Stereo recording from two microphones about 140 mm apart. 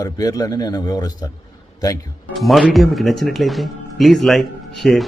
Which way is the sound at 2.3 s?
Centre (ahead or behind).